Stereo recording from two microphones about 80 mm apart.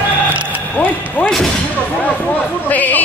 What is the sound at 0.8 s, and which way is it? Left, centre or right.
Speech, left.